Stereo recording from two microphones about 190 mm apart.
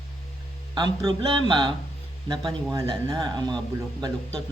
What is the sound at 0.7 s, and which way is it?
Speech, 25° right (ahead or behind).